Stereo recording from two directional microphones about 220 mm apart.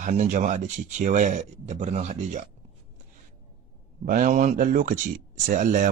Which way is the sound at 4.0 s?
35° right (ahead or behind).